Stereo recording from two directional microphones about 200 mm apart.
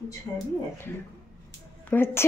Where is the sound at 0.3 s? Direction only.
20° left (ahead or behind).